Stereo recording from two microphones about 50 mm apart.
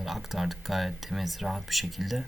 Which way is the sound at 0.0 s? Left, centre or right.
Centre.